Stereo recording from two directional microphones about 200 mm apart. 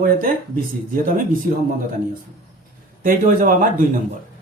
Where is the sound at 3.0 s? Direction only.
45° right (ahead or behind).